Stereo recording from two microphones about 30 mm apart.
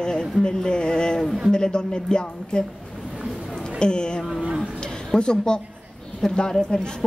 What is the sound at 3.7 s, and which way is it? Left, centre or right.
Speech, left.